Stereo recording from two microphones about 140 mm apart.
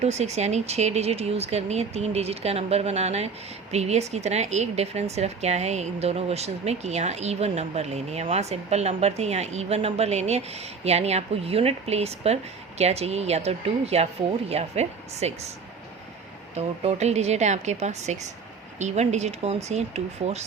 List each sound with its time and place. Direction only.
0.0 s speech: 50° right (ahead or behind)
16.6 s speech: 50° right (ahead or behind)